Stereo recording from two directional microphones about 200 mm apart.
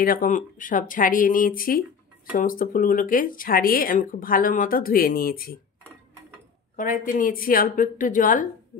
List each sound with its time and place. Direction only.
0.0 s speech: 45° left (ahead or behind)
6.8 s speech: 45° left (ahead or behind)